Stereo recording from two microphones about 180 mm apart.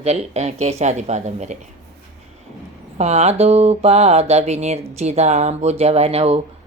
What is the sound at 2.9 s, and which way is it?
Speech, 35° right (ahead or behind).